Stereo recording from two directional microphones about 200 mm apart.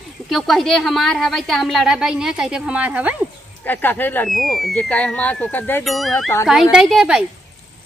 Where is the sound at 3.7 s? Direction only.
10° left (ahead or behind).